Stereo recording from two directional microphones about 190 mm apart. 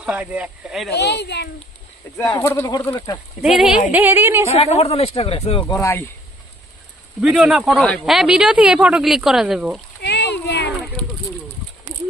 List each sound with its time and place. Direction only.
0.0 s speech: 5° right (ahead or behind)
0.9 s a child's voice: 65° left (ahead or behind)
2.3 s speech: 20° left (ahead or behind)
3.4 s a woman's voice: 5° right (ahead or behind)
4.5 s speech: 30° left (ahead or behind); by 6.0 s 15° left (ahead or behind)
7.2 s speech: 5° right (ahead or behind)
10.0 s splash: 60° left (ahead or behind)